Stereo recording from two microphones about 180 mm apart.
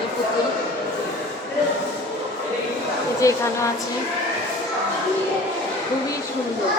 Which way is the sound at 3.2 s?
15° left (ahead or behind).